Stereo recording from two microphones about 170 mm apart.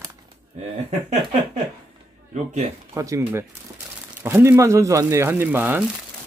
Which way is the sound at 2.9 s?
15° right (ahead or behind).